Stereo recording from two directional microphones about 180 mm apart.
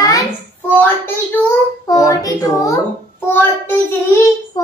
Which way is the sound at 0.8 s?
10° left (ahead or behind).